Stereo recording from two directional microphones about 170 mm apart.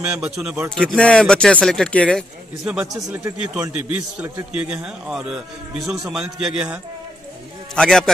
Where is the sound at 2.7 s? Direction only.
5° right (ahead or behind).